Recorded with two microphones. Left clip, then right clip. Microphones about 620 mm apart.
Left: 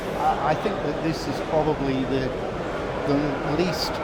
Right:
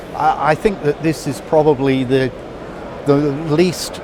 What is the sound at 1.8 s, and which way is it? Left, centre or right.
Speech, right.